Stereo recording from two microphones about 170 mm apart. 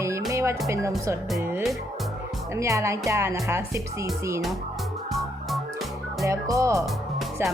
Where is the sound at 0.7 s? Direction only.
15° right (ahead or behind).